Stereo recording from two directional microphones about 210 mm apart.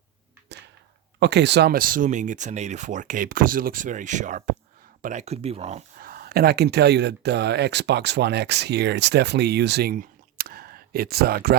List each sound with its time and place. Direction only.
1.2 s speech: 55° right (ahead or behind); by 5.8 s 30° right (ahead or behind)
6.0 s speech: 45° right (ahead or behind)